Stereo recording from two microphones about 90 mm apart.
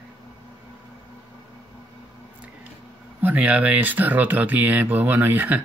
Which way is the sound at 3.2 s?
20° right (ahead or behind).